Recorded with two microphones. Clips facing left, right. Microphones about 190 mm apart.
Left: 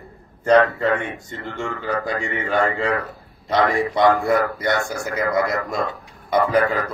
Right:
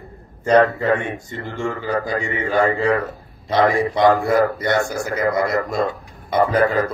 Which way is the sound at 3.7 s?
Centre (ahead or behind).